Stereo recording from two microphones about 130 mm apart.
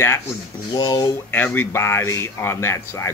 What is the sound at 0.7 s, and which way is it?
Speech, 30° left (ahead or behind).